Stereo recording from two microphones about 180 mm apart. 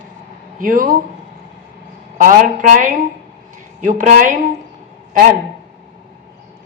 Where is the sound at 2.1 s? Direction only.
45° right (ahead or behind).